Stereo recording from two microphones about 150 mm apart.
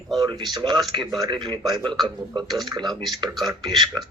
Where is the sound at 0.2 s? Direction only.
30° right (ahead or behind).